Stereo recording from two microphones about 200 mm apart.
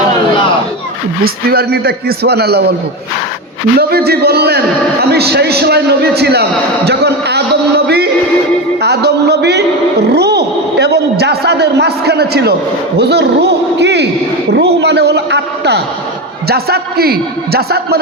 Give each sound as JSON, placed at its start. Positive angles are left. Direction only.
{"t": 1.2, "sound": "a man's voice", "side_deg": -50}
{"t": 3.8, "sound": "a man's voice", "side_deg": -50}
{"t": 6.8, "sound": "a sound", "side_deg": -55}
{"t": 8.8, "sound": "a man's voice", "side_deg": -55}